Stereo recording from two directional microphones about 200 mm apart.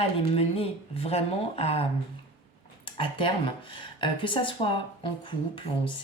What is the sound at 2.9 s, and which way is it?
Speech, 25° left (ahead or behind).